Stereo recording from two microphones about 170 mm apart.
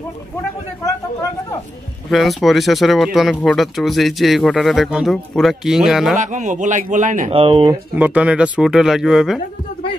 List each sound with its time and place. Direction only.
2.0 s speech: centre (ahead or behind)
6.1 s a man's voice: 45° right (ahead or behind)
7.3 s speech: 30° right (ahead or behind)
7.9 s speech: 10° right (ahead or behind)